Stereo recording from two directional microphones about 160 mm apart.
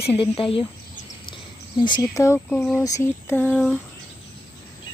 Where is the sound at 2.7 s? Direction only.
20° left (ahead or behind).